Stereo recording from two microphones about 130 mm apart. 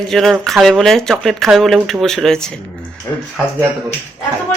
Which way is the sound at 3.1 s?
20° left (ahead or behind).